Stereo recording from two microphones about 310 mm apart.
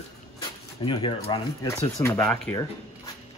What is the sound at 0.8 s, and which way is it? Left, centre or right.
Speech, centre.